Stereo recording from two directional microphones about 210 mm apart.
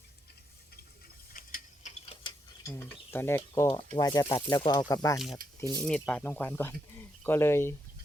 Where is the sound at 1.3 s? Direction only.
40° left (ahead or behind).